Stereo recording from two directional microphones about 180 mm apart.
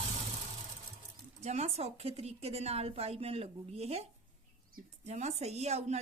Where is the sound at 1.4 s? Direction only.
35° right (ahead or behind).